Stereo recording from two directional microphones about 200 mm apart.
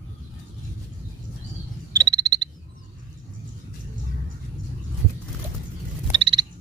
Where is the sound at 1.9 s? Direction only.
20° right (ahead or behind).